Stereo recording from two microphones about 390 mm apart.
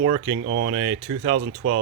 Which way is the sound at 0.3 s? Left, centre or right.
Right.